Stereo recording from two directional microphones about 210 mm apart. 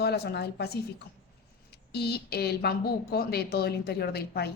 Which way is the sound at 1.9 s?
50° left (ahead or behind).